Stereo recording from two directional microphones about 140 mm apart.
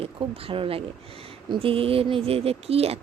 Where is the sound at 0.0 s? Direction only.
40° right (ahead or behind).